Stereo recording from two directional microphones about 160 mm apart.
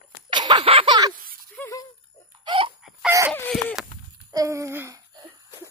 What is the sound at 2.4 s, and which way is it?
Wail, 35° right (ahead or behind).